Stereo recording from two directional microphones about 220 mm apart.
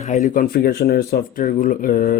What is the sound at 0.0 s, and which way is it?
Speech, 35° left (ahead or behind).